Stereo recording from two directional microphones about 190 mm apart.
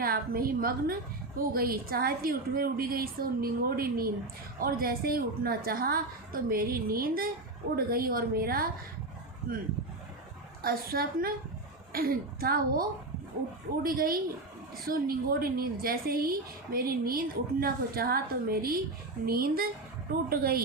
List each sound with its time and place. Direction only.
0.0 s a woman's voice: 50° right (ahead or behind)
10.6 s a woman's voice: 50° right (ahead or behind)
13.8 s a woman's voice: 50° right (ahead or behind)